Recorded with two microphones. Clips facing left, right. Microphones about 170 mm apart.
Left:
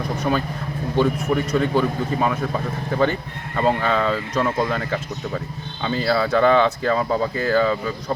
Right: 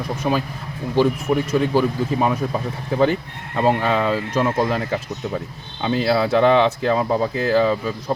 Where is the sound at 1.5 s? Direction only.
10° right (ahead or behind).